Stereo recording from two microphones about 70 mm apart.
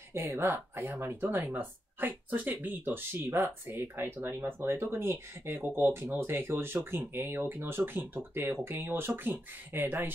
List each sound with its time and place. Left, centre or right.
0.1 s speech: right